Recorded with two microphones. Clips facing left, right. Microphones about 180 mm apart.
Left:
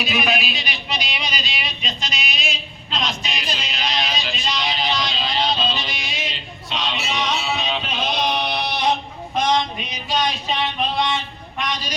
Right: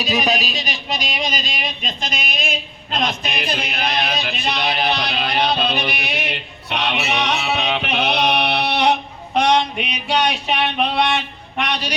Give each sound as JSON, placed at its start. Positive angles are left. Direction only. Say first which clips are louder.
{"t": 0.0, "sound": "music", "louder": "right 2 dB", "side_deg": -40}